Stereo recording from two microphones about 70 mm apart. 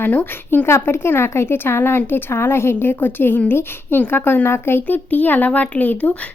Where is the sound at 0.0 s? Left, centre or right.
Left.